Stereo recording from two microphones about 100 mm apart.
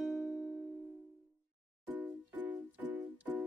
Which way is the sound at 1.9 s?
15° right (ahead or behind).